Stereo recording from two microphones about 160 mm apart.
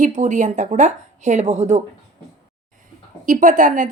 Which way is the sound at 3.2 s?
55° right (ahead or behind).